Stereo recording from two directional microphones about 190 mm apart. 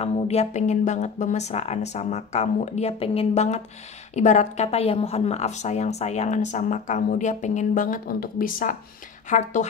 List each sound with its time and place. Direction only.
0.0 s speech: 35° left (ahead or behind)